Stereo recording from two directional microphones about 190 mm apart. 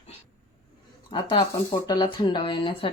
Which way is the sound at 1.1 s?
25° left (ahead or behind).